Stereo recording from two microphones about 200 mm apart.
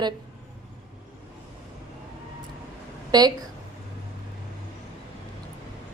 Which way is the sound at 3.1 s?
20° right (ahead or behind).